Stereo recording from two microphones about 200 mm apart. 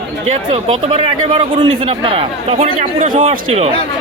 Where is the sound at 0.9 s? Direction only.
30° right (ahead or behind).